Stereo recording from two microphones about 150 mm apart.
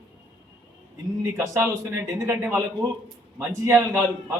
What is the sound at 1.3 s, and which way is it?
A man's voice, 15° right (ahead or behind).